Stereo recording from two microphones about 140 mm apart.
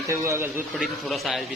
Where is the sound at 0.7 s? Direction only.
Centre (ahead or behind).